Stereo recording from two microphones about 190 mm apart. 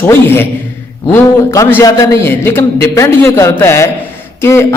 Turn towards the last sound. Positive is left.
turn(degrees=15)  # may be behind; listen again after turning